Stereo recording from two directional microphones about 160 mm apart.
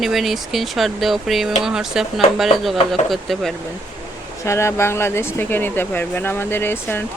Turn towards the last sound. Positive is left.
turn(degrees=15)  # may be behind; listen again after turning